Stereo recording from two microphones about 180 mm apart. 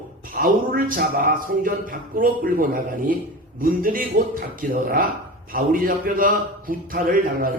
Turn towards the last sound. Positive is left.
turn(degrees=-50)  # may be behind; listen again after turning